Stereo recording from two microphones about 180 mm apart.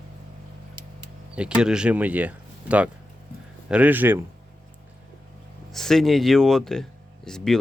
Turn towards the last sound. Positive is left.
turn(degrees=5)  # may be behind; listen again after turning